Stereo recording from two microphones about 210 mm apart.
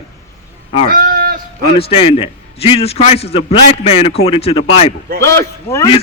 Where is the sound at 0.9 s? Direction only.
45° right (ahead or behind).